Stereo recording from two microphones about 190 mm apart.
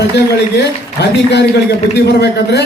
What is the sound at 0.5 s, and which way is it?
Speech, 60° left (ahead or behind).